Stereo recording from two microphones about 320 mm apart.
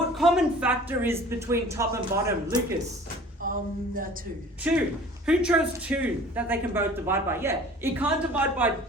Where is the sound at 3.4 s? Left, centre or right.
Right.